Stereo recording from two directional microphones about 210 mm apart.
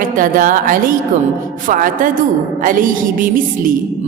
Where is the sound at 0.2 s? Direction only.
40° right (ahead or behind).